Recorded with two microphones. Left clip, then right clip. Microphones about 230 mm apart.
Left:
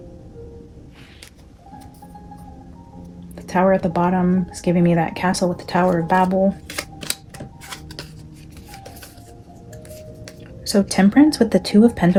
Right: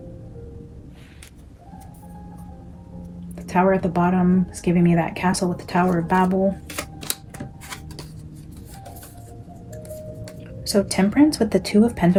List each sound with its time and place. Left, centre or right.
3.3 s a sound: left
3.9 s speech: left
6.7 s camera: centre
10.6 s speech: left